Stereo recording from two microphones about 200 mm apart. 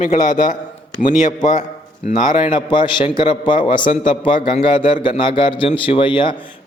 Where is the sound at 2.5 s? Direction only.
25° left (ahead or behind).